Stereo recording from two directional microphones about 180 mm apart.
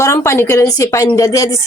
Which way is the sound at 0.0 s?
15° left (ahead or behind).